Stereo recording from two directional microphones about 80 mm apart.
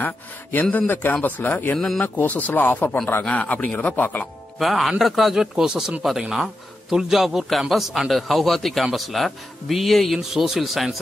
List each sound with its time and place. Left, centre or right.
0.0 s speech: left
1.8 s speech: centre
2.1 s speech: left
4.6 s a man's voice: centre